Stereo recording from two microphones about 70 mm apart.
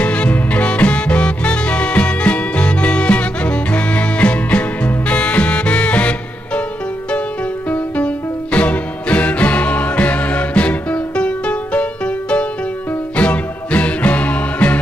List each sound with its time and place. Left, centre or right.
0.0 s music: centre
7.7 s music: centre